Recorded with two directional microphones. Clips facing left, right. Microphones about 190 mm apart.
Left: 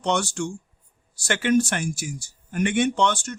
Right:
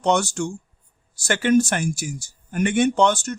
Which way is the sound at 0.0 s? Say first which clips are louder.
Right 4 dB; 40° right (ahead or behind).